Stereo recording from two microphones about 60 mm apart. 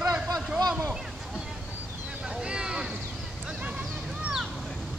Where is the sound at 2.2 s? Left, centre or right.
Centre.